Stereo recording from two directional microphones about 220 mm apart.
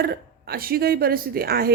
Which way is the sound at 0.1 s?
45° right (ahead or behind).